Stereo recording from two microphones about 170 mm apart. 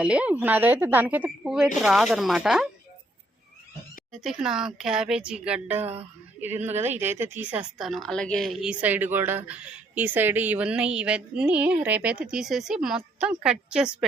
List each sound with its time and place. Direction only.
0.0 s a woman's voice: 5° right (ahead or behind)
4.1 s a woman's voice: centre (ahead or behind)
6.6 s a woman's voice: 40° right (ahead or behind)
6.8 s a woman's voice: 15° right (ahead or behind)